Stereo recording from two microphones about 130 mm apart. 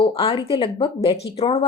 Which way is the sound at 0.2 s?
45° left (ahead or behind).